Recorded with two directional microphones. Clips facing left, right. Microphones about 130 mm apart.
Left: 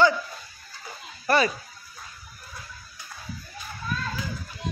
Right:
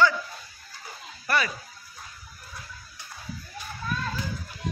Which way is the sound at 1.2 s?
30° left (ahead or behind).